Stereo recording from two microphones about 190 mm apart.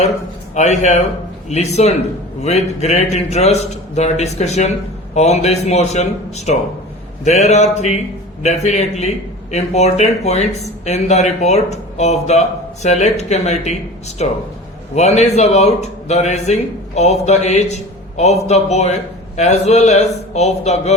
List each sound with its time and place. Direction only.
0.5 s a man's voice: 40° left (ahead or behind)